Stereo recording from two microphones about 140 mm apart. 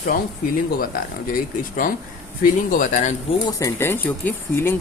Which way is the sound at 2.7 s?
65° left (ahead or behind).